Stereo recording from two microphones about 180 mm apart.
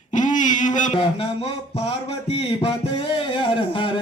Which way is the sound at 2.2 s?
30° left (ahead or behind).